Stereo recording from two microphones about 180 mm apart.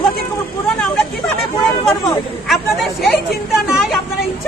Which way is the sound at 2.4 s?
Centre (ahead or behind).